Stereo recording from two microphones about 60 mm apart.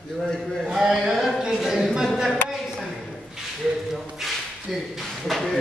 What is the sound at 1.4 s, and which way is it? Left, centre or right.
Speech, centre.